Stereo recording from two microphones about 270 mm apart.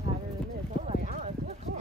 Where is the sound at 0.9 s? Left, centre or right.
Right.